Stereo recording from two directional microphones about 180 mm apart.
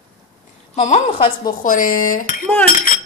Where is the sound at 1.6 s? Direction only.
50° left (ahead or behind).